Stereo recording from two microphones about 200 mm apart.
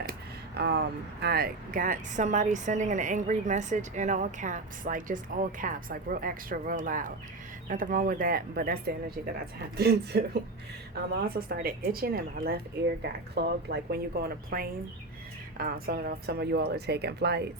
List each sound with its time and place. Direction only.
0.0 s speech: 50° right (ahead or behind)